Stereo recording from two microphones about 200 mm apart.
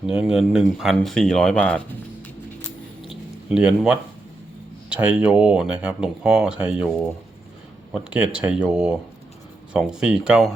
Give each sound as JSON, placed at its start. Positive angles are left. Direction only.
{"t": 0.0, "sound": "speech", "side_deg": -5}
{"t": 3.1, "sound": "a sound", "side_deg": -5}
{"t": 4.9, "sound": "speech", "side_deg": -5}
{"t": 8.1, "sound": "speech", "side_deg": -5}